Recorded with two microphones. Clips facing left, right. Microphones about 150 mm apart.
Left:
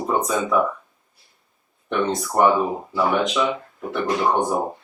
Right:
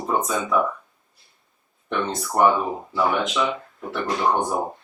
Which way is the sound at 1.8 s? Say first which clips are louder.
Left 4 dB; centre (ahead or behind).